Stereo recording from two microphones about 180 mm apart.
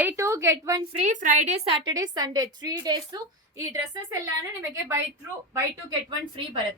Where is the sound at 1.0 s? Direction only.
45° right (ahead or behind).